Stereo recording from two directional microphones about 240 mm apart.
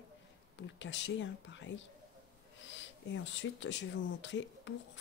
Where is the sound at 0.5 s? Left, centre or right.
Left.